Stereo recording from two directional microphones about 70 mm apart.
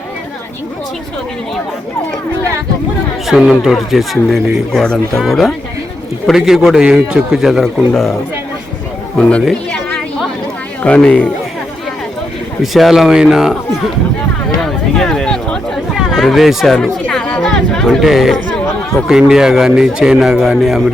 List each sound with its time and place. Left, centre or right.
3.2 s speech: centre
9.1 s speech: centre
12.7 s speech: centre
14.6 s a sound: centre
16.1 s speech: centre
16.7 s speech: centre
17.4 s chatter: centre
18.0 s speech: centre